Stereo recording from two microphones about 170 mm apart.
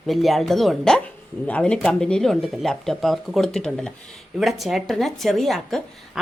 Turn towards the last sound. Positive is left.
turn(degrees=0)  # may be behind; listen again after turning